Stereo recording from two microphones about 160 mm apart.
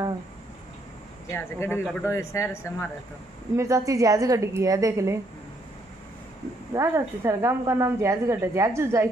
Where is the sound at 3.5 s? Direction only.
20° right (ahead or behind).